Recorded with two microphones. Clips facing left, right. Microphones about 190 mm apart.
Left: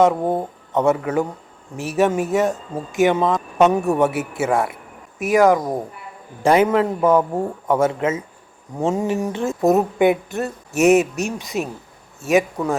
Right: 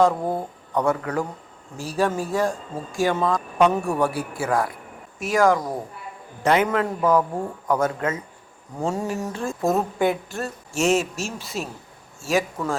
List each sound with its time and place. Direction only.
0.0 s speech: 20° left (ahead or behind)